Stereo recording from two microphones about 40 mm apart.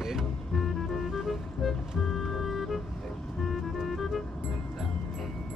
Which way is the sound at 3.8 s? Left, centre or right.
Centre.